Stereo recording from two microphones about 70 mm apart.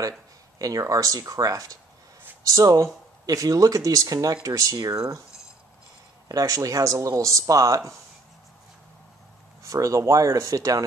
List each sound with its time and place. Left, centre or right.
0.6 s speech: right
6.2 s a man's voice: right
9.6 s a man's voice: right